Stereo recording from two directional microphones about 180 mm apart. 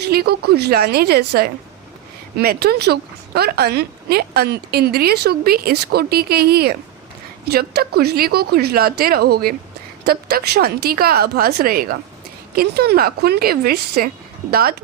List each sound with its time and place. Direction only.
0.0 s speech: 60° right (ahead or behind)